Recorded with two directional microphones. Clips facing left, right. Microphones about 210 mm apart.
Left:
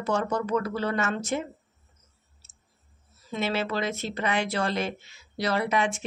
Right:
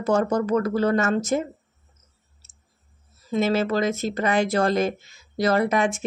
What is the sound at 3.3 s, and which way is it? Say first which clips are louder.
Speech: right 7 dB; 45° right (ahead or behind).